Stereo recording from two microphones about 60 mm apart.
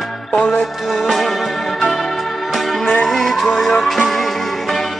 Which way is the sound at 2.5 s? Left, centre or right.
Centre.